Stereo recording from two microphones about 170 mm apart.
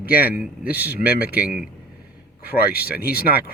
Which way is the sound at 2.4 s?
65° left (ahead or behind).